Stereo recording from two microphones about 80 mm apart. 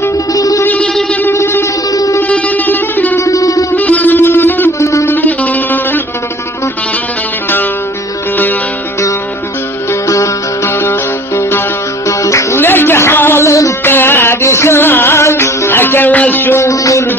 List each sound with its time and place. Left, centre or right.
0.3 s music: left
1.3 s a sound: left
1.9 s music: left
2.2 s music: centre
3.2 s music: left
3.7 s music: left
4.7 s a sound: left
5.1 s music: left
10.0 s music: left
12.1 s music: left
13.8 s music: left
16.6 s music: left